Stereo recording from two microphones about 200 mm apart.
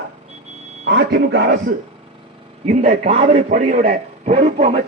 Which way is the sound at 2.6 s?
35° right (ahead or behind).